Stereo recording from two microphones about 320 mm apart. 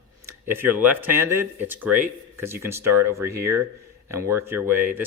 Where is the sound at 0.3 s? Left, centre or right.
Centre.